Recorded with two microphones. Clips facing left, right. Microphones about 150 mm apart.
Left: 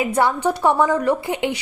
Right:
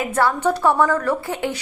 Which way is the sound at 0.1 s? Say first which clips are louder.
Even; 15° left (ahead or behind).